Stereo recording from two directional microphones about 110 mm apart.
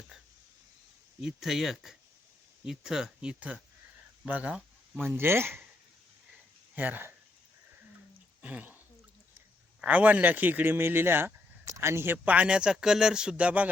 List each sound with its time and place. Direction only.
1.2 s speech: 5° right (ahead or behind); by 5.6 s 20° right (ahead or behind)
6.7 s speech: 15° right (ahead or behind)
8.4 s a sound: 10° right (ahead or behind)
9.8 s speech: 15° right (ahead or behind)